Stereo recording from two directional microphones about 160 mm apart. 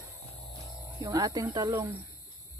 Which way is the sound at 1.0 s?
20° right (ahead or behind).